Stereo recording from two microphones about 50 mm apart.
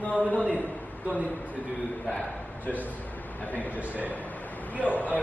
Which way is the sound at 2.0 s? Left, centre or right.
Left.